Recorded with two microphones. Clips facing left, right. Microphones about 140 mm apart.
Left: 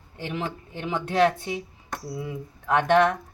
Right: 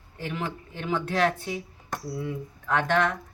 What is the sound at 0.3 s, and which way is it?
A woman's voice, 20° left (ahead or behind).